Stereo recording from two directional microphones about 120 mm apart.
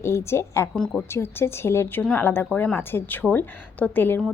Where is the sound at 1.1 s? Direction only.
20° left (ahead or behind).